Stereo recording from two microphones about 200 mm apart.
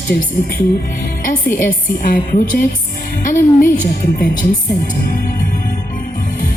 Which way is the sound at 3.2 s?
40° left (ahead or behind).